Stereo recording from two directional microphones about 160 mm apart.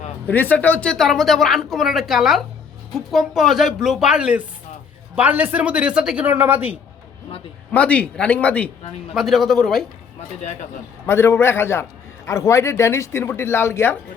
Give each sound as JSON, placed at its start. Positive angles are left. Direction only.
{"t": 0.3, "sound": "speech", "side_deg": 10}
{"t": 7.7, "sound": "a man's voice", "side_deg": 10}
{"t": 11.0, "sound": "a man's voice", "side_deg": 15}